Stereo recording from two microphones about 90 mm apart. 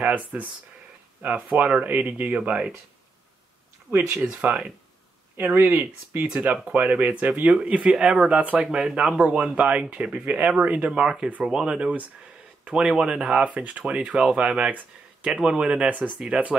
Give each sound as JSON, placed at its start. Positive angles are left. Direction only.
{"t": 0.0, "sound": "speech", "side_deg": -15}
{"t": 4.2, "sound": "speech", "side_deg": -10}
{"t": 6.2, "sound": "speech", "side_deg": -10}